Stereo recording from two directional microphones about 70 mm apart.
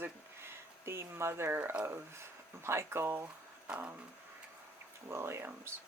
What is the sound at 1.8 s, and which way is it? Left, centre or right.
Speech, right.